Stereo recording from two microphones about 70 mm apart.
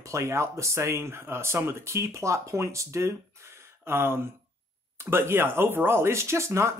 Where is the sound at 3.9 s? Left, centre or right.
Right.